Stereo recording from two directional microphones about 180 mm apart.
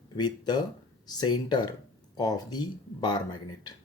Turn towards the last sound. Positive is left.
turn(degrees=25)  # may be behind; listen again after turning